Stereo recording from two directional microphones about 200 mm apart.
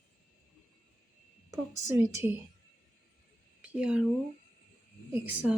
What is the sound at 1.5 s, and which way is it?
Speech, 15° right (ahead or behind).